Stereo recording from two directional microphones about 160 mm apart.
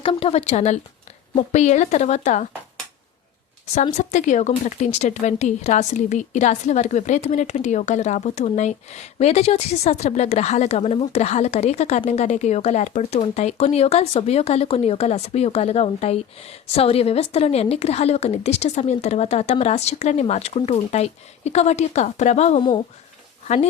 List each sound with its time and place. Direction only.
0.0 s speech: 35° left (ahead or behind)
3.9 s speech: 50° left (ahead or behind)